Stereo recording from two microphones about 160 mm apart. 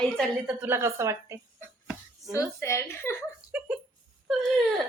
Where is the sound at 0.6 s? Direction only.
15° right (ahead or behind).